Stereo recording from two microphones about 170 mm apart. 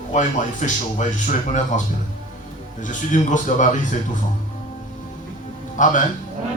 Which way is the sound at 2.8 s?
45° left (ahead or behind).